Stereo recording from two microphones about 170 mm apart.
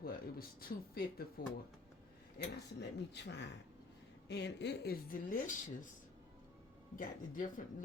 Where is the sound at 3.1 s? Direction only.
90° left; by 5.5 s 55° left (ahead or behind).